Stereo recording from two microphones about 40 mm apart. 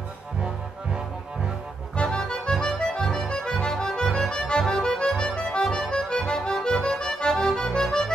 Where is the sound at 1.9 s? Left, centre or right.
Left; by 5.0 s centre.